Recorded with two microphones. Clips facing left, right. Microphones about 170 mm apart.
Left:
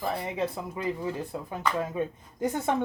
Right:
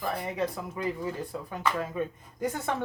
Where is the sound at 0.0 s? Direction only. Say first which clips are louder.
Left 1 dB; 20° left (ahead or behind).